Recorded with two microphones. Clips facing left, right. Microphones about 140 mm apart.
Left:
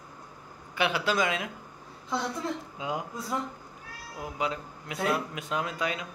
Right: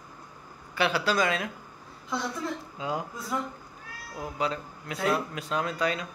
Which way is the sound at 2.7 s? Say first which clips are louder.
Right 1 dB; 15° left (ahead or behind).